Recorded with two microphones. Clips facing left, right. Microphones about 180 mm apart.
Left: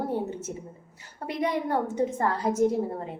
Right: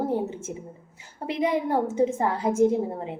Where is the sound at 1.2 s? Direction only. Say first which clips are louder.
Right 3 dB; 25° right (ahead or behind).